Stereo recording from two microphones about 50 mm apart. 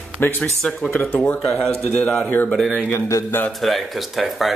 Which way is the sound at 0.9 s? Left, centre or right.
Left.